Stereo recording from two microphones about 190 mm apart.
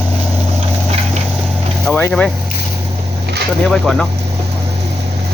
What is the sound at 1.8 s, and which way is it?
Vehicle, 5° left (ahead or behind).